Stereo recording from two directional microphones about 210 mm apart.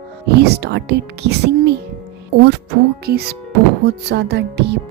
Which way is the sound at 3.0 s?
50° right (ahead or behind).